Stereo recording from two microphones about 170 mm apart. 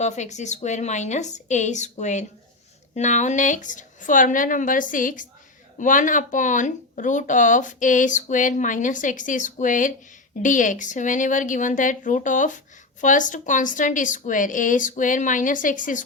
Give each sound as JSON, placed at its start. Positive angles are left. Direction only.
{"t": 0.0, "sound": "speech", "side_deg": 45}